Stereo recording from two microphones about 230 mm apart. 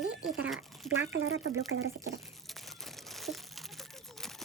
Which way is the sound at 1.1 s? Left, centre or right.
Right.